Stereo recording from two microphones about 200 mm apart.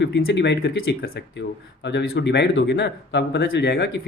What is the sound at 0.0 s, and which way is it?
Speech, 60° left (ahead or behind).